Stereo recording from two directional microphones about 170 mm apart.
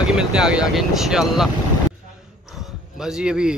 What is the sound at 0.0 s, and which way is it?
Speech, 5° right (ahead or behind).